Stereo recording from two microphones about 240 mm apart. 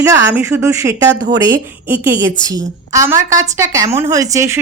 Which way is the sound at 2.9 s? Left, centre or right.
Centre.